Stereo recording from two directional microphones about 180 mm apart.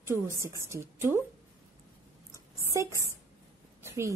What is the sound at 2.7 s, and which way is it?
Speech, 15° right (ahead or behind).